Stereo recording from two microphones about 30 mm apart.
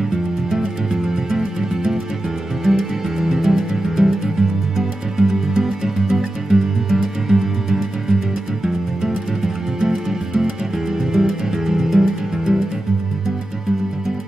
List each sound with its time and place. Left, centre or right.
0.9 s music: centre
11.1 s music: centre